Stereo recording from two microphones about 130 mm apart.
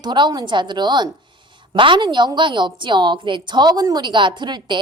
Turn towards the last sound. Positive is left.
turn(degrees=-35)  # may be behind; listen again after turning